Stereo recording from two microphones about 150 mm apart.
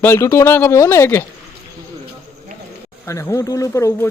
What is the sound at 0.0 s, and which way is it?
Speech, 15° left (ahead or behind).